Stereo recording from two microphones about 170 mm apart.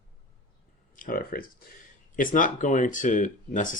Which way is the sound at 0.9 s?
55° left (ahead or behind).